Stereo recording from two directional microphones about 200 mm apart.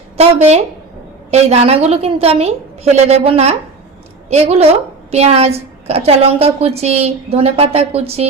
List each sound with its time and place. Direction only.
0.2 s a woman's voice: 30° right (ahead or behind)